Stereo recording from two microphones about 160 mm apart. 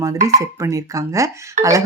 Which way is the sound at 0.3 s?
20° right (ahead or behind).